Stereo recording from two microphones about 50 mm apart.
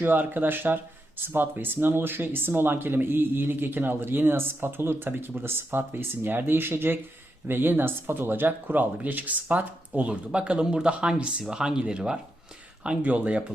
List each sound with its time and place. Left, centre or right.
0.0 s speech: right